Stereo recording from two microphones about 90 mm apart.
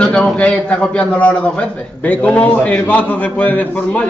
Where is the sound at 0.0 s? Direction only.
10° left (ahead or behind).